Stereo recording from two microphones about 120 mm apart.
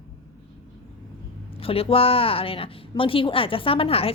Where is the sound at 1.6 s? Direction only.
50° left (ahead or behind).